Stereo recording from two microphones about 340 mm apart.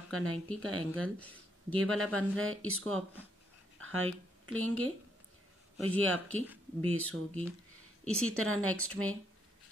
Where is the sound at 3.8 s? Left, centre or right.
Right.